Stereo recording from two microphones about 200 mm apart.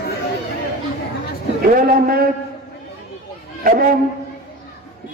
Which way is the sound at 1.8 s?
45° right (ahead or behind).